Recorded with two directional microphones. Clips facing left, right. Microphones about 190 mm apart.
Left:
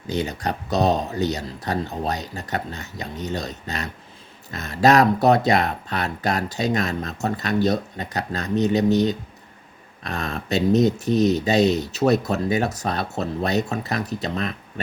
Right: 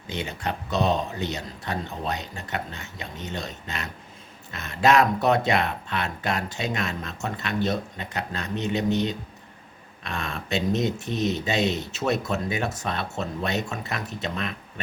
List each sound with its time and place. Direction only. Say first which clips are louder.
0.1 s speech: left 5 dB; 40° left (ahead or behind)